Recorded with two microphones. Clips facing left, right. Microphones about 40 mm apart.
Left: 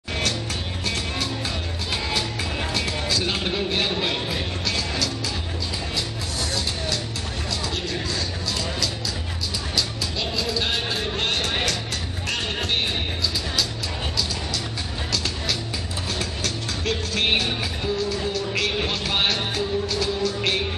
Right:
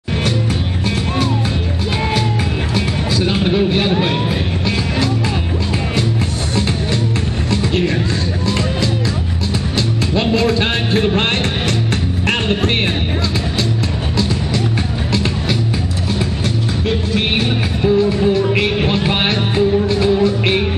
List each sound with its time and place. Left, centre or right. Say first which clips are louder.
2.7 s music: right 6 dB; centre
7.5 s music: right 12 dB; right
9.8 s music: right 9 dB; right
16.8 s music: right 4 dB; right